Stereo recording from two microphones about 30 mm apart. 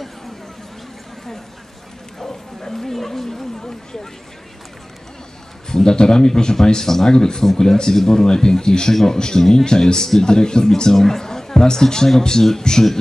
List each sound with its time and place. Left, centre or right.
2.1 s bow-wow: centre
5.7 s a man's voice: left